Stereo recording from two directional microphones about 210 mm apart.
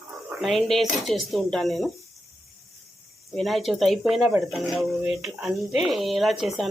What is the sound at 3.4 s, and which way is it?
Speech, centre (ahead or behind).